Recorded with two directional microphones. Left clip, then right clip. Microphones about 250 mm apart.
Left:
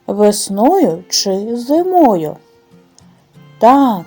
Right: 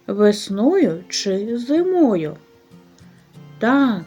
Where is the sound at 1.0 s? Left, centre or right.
Centre.